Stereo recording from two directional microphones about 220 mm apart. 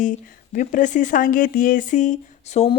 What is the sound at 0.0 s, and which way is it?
Speech, 35° left (ahead or behind).